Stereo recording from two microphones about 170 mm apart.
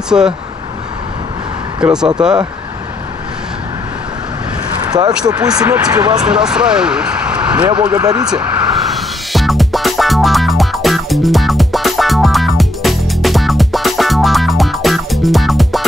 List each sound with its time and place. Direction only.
0.1 s speech: 5° right (ahead or behind)
1.8 s speech: 5° right (ahead or behind)
4.9 s speech: 25° right (ahead or behind)
6.2 s speech: 5° right (ahead or behind)
7.6 s speech: 25° right (ahead or behind)
8.9 s music: centre (ahead or behind)